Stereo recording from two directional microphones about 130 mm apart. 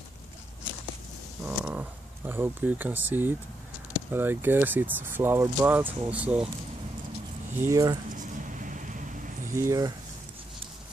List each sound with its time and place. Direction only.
1.4 s speech: 15° right (ahead or behind)
7.6 s speech: 25° right (ahead or behind)
8.1 s vehicle: 85° right
9.5 s speech: 20° right (ahead or behind)